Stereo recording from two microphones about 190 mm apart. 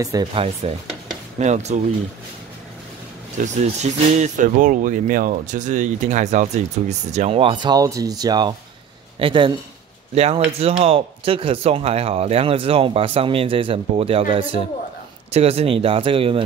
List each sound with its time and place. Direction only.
0.0 s speech: 20° right (ahead or behind); by 1.8 s 35° right (ahead or behind)
3.3 s speech: 40° right (ahead or behind)